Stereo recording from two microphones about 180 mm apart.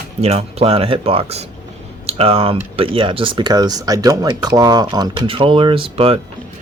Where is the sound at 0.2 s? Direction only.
35° right (ahead or behind).